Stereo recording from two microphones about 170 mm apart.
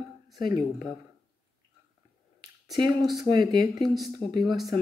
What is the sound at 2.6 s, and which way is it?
Speech, 25° right (ahead or behind).